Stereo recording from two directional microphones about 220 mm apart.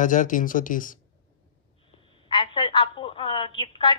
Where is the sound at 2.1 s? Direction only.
25° left (ahead or behind).